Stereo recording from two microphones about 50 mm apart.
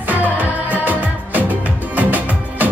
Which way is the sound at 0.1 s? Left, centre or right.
Right.